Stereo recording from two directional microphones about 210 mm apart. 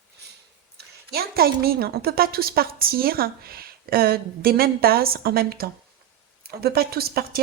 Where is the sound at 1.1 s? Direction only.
45° right (ahead or behind).